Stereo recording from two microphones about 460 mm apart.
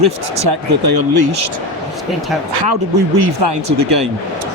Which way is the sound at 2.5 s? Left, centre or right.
Right.